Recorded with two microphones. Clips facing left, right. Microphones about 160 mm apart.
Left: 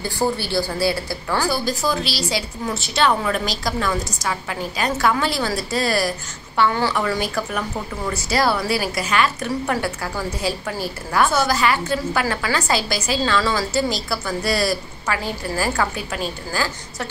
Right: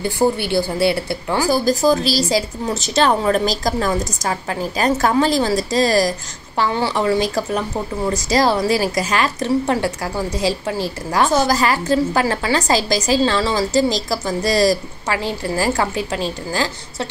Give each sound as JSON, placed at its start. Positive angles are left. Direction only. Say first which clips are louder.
{"t": 0.0, "sound": "a woman's voice", "louder": "right 5 dB", "side_deg": -20}
{"t": 1.5, "sound": "a woman's voice", "louder": "right 7 dB", "side_deg": -40}
{"t": 6.7, "sound": "a woman's voice", "louder": "right 3 dB", "side_deg": -25}